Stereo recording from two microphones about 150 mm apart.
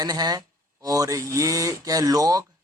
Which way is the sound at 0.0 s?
25° right (ahead or behind).